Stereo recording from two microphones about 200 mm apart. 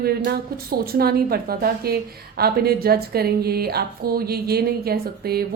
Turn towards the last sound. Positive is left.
turn(degrees=-50)  # may be behind; listen again after turning